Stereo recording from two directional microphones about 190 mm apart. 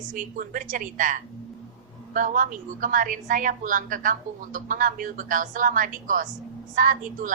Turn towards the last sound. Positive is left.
turn(degrees=-45)  # may be behind; listen again after turning